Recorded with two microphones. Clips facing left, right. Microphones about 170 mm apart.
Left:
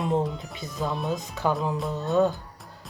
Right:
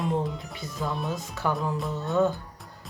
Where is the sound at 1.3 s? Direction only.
20° left (ahead or behind).